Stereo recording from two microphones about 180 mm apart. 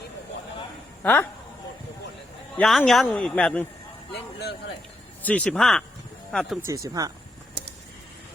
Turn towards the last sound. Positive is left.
turn(degrees=-20)  # may be behind; listen again after turning